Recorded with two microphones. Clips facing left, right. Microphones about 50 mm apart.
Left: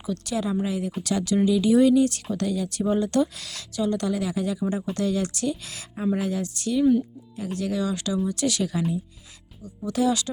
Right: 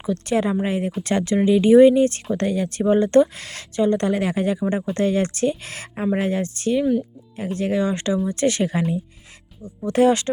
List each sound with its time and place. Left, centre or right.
0.0 s speech: right